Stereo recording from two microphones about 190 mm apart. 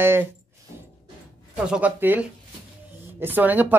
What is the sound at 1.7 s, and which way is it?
Speech, 5° right (ahead or behind).